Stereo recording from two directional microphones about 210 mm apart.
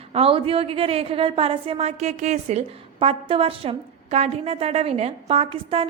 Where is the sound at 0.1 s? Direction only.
25° right (ahead or behind).